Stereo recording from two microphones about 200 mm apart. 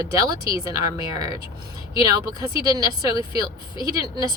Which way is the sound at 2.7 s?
15° right (ahead or behind).